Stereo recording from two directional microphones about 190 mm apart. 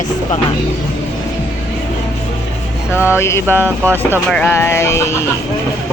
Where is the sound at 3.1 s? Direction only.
15° left (ahead or behind).